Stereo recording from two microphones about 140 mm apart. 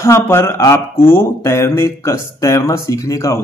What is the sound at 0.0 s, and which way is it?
Speech, 20° left (ahead or behind).